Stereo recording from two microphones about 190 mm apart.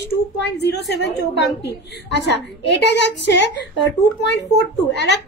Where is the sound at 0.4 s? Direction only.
60° left (ahead or behind).